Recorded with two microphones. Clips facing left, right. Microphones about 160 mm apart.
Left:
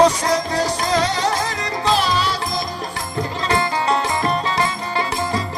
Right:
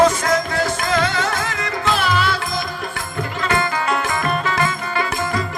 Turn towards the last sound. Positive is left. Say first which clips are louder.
# even
turn(degrees=30)  # may be behind; listen again after turning